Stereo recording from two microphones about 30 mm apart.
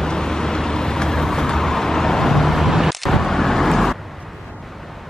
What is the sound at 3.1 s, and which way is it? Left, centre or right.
Vehicle, centre.